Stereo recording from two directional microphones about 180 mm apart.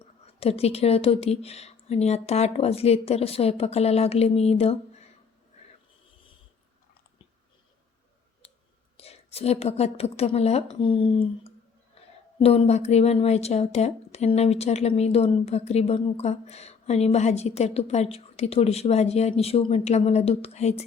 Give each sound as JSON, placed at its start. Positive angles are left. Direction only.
{"t": 0.3, "sound": "a woman's voice", "side_deg": 35}
{"t": 9.0, "sound": "a woman's voice", "side_deg": 35}
{"t": 12.0, "sound": "a sound", "side_deg": 35}
{"t": 12.4, "sound": "a woman's voice", "side_deg": 35}